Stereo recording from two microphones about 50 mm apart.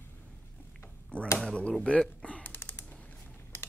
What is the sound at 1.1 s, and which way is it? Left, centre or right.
Speech, left.